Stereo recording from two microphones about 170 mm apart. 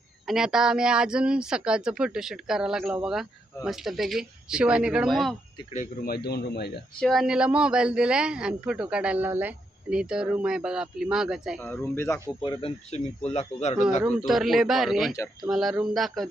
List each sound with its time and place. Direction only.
0.3 s a woman's voice: 5° right (ahead or behind)
5.7 s a man's voice: 55° left (ahead or behind)
7.0 s a woman's voice: centre (ahead or behind)
11.6 s speech: 15° left (ahead or behind)
12.4 s speech: 30° left (ahead or behind)
14.3 s a woman's voice: centre (ahead or behind)